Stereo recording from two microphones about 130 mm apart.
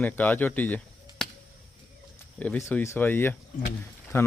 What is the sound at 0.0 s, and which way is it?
Speech, 10° left (ahead or behind).